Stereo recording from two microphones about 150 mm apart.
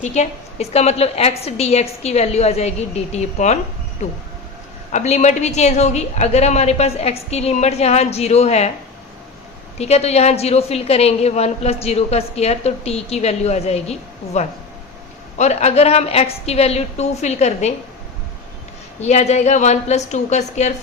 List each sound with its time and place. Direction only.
0.0 s a woman's voice: 50° left (ahead or behind)
4.9 s a woman's voice: 50° left (ahead or behind)
9.7 s a woman's voice: 45° left (ahead or behind)
18.9 s a woman's voice: 50° left (ahead or behind)